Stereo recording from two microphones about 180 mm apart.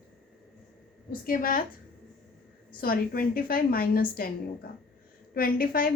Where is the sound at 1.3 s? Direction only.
50° left (ahead or behind).